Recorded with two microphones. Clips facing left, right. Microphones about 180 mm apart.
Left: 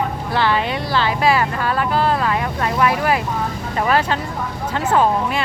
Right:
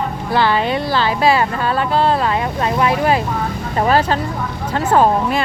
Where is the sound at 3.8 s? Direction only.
35° right (ahead or behind).